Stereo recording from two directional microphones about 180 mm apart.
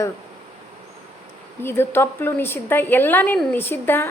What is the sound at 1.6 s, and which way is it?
A woman's voice, 15° left (ahead or behind).